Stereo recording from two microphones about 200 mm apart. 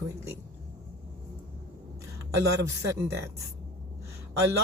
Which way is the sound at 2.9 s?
15° right (ahead or behind).